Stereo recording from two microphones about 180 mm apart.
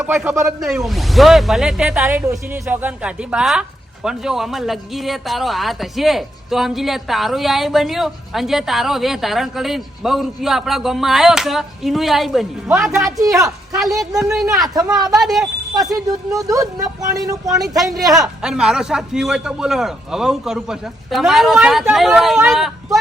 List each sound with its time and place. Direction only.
0.0 s speech: 5° right (ahead or behind)
13.1 s speech: 20° right (ahead or behind)
13.7 s speech: centre (ahead or behind)
14.6 s speech: 20° right (ahead or behind)
15.2 s speech: centre (ahead or behind)
15.7 s speech: 20° right (ahead or behind)
17.5 s speech: centre (ahead or behind)